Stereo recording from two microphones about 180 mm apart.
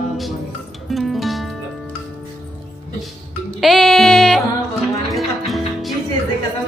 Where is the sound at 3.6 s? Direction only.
Centre (ahead or behind).